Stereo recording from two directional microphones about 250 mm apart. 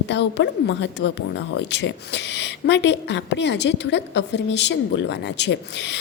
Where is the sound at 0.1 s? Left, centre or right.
Left.